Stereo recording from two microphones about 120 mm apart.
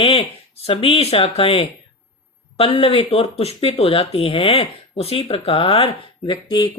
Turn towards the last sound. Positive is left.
turn(degrees=40)  # may be behind; listen again after turning